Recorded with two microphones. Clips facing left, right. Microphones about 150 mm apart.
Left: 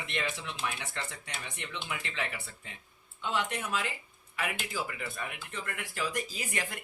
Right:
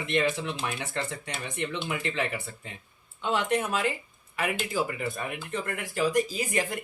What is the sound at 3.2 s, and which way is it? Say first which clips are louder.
Speech: right 7 dB; 65° right (ahead or behind).